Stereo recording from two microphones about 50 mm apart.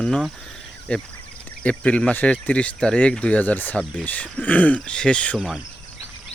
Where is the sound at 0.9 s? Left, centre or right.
Left.